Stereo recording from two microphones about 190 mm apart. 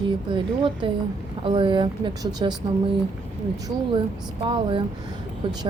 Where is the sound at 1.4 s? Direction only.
25° right (ahead or behind).